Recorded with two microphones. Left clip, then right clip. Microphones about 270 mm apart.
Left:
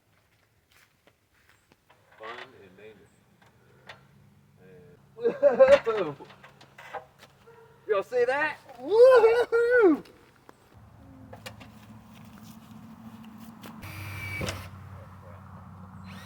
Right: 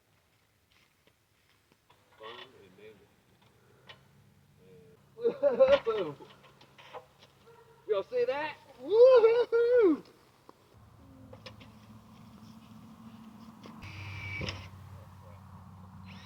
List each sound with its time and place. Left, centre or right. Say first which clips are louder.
5.2 s speech: left 5 dB; centre
7.9 s a sound: left 5 dB; centre
13.8 s vehicle: left 4 dB; centre